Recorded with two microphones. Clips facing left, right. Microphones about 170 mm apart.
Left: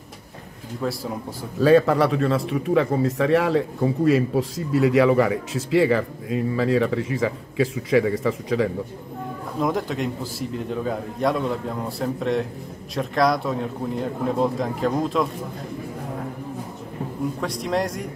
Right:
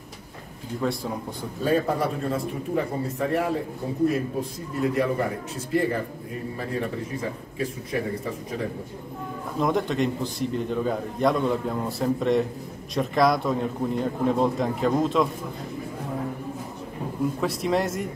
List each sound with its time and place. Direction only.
0.8 s a man's voice: centre (ahead or behind)
1.6 s a man's voice: 90° left
9.6 s a man's voice: centre (ahead or behind)
17.4 s a man's voice: centre (ahead or behind)